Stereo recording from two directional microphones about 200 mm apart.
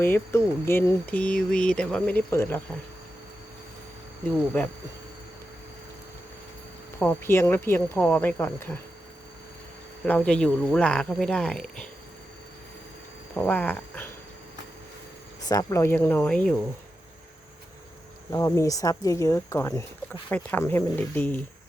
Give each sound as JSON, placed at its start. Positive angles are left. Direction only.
{"t": 0.0, "sound": "speech", "side_deg": 10}
{"t": 7.0, "sound": "speech", "side_deg": 10}
{"t": 10.1, "sound": "speech", "side_deg": 5}
{"t": 13.3, "sound": "speech", "side_deg": 10}
{"t": 15.4, "sound": "speech", "side_deg": 15}
{"t": 18.3, "sound": "speech", "side_deg": 15}